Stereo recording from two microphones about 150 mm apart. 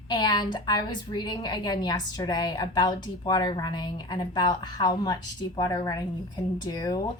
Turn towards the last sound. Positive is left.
turn(degrees=25)  # may be behind; listen again after turning